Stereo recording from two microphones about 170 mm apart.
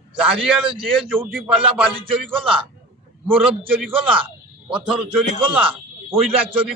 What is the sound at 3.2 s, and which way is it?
Speech, 10° right (ahead or behind).